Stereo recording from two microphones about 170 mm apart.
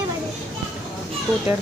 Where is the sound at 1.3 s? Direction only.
Centre (ahead or behind).